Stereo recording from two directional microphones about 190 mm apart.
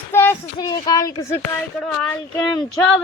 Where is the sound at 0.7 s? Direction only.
20° left (ahead or behind).